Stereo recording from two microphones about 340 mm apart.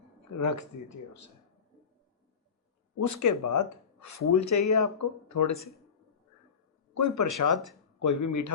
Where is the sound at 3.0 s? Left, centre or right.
Left.